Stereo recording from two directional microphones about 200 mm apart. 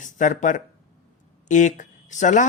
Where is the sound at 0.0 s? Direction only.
40° left (ahead or behind).